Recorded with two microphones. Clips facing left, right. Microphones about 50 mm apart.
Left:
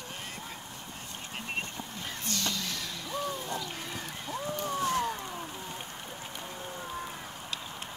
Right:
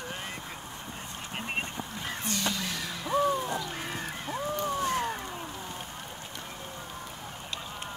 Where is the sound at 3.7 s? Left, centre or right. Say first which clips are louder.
Right 3 dB; right.